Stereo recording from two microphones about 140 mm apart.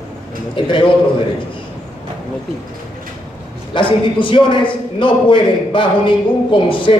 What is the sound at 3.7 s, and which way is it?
A man's voice, 35° left (ahead or behind).